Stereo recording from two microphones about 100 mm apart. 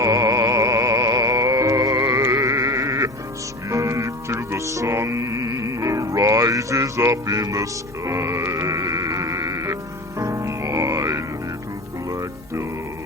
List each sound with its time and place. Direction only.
0.0 s music: 30° right (ahead or behind)